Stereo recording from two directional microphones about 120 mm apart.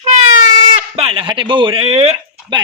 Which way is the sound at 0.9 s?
50° right (ahead or behind).